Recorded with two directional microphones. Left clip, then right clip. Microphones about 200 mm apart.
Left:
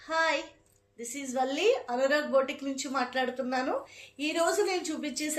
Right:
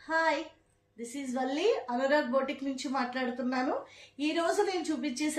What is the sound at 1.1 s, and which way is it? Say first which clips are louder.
A woman's voice: left 3 dB; 15° right (ahead or behind).